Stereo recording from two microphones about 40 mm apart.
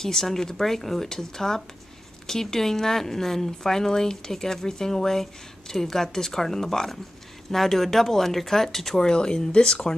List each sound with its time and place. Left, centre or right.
0.0 s speech: centre
9.1 s speech: centre